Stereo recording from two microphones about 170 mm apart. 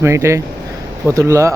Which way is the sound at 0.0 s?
15° right (ahead or behind).